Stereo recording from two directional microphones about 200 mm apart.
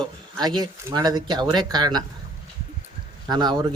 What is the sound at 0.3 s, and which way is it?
Speech, 20° right (ahead or behind).